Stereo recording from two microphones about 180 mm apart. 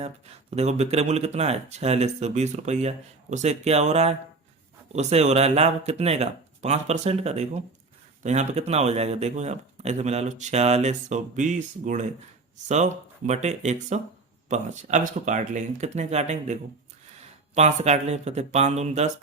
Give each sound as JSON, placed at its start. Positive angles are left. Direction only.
{"t": 0.5, "sound": "speech", "side_deg": -35}